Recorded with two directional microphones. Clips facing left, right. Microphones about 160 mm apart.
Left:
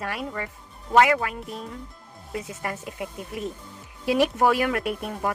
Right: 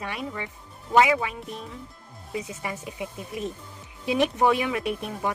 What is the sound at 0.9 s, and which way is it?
Speech, 5° right (ahead or behind).